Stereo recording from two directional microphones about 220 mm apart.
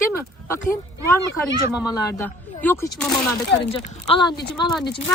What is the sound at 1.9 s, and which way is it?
Speech, 15° left (ahead or behind).